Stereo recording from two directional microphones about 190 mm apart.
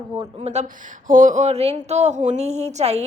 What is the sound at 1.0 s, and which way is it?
A woman's voice, 45° right (ahead or behind).